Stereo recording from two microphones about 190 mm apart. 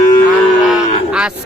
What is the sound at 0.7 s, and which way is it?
Cattle, 5° right (ahead or behind).